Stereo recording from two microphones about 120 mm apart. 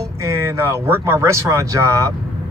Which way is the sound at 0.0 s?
25° right (ahead or behind).